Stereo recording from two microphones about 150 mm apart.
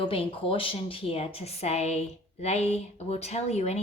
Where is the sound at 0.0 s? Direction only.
35° left (ahead or behind).